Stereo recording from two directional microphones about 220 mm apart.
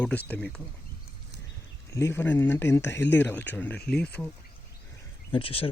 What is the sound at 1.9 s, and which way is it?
Speech, 15° left (ahead or behind).